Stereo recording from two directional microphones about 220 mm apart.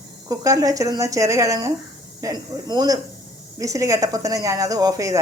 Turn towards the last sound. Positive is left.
turn(degrees=-15)  # may be behind; listen again after turning